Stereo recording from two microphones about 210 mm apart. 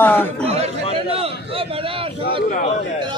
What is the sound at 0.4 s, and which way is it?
Chatter, 30° right (ahead or behind).